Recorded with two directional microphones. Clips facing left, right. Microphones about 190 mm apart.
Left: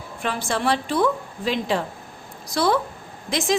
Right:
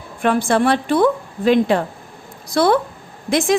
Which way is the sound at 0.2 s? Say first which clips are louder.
Right 9 dB; 55° right (ahead or behind).